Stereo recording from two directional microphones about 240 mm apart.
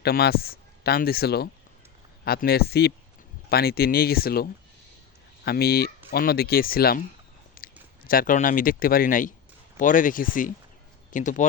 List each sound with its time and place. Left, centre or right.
0.0 s speech: left
5.5 s speech: left